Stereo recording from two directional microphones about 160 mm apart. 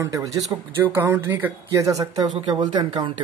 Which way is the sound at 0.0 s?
20° right (ahead or behind).